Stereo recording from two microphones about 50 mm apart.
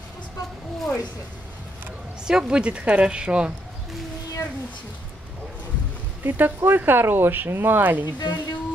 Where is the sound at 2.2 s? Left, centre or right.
Centre.